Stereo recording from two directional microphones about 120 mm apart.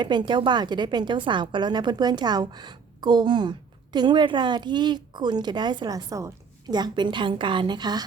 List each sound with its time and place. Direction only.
0.0 s a woman's voice: 40° right (ahead or behind)